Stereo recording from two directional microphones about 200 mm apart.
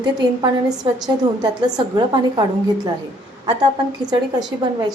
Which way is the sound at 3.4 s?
20° right (ahead or behind).